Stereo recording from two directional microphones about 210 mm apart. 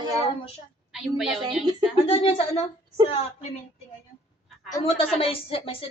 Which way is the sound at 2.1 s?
25° left (ahead or behind).